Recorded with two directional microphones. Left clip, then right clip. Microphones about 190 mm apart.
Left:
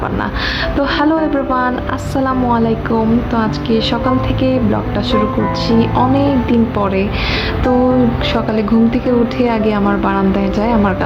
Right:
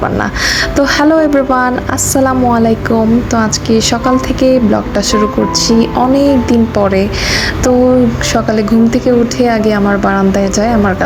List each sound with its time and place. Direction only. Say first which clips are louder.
0.8 s a woman's voice: right 5 dB; 20° right (ahead or behind)
8.3 s a woman's voice: right 4 dB; 15° right (ahead or behind)